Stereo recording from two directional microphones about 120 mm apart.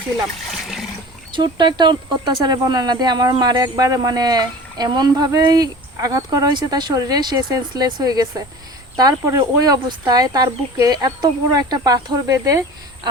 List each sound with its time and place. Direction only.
1.3 s speech: 40° right (ahead or behind)